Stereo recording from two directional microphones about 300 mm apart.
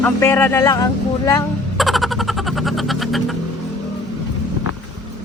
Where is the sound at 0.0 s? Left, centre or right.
Centre.